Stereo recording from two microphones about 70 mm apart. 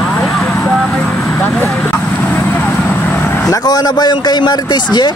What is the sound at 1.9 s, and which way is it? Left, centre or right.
Vehicle, left.